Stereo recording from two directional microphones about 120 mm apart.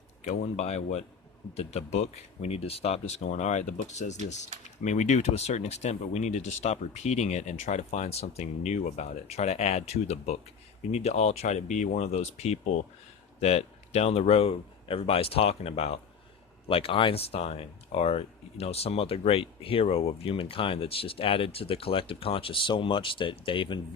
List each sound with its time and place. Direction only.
0.3 s a man's voice: 65° left (ahead or behind); by 23.8 s 45° left (ahead or behind)